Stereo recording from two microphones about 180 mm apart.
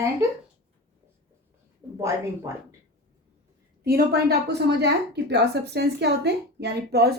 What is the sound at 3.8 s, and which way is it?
A woman's voice, 60° right (ahead or behind).